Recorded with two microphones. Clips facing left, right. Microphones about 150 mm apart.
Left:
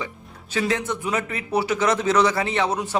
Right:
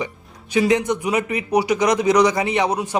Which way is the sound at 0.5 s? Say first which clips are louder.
Right 6 dB; 15° right (ahead or behind).